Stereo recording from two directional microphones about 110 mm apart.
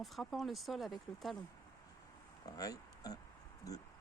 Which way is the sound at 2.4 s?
35° left (ahead or behind).